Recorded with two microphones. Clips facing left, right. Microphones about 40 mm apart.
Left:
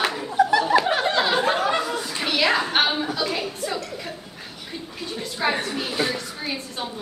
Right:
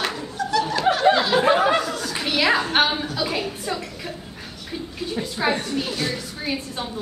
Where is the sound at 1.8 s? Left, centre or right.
Centre.